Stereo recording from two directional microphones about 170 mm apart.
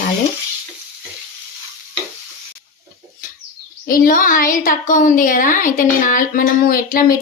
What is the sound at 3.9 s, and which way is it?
A woman's voice, 55° left (ahead or behind).